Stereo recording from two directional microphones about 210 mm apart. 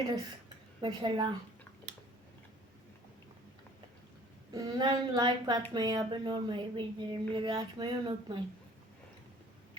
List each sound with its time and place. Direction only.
0.8 s speech: 20° right (ahead or behind)
4.5 s speech: 20° right (ahead or behind)